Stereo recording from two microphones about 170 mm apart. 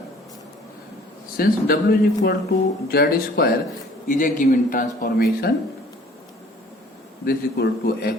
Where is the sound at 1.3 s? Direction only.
65° left (ahead or behind).